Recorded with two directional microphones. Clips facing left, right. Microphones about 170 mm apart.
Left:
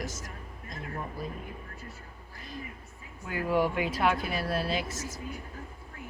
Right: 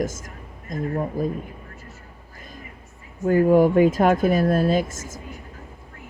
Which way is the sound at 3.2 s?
45° right (ahead or behind).